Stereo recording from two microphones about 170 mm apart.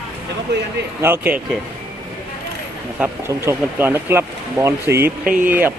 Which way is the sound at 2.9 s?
15° right (ahead or behind).